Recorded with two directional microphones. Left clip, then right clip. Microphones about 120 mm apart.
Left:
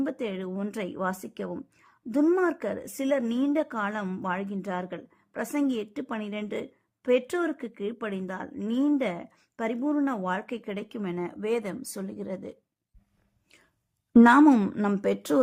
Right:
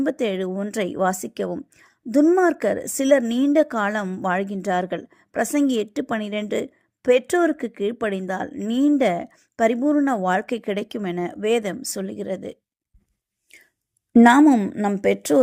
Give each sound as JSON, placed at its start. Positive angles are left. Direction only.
{"t": 0.0, "sound": "a woman's voice", "side_deg": -35}
{"t": 14.4, "sound": "a woman's voice", "side_deg": 0}
{"t": 15.0, "sound": "speech", "side_deg": -20}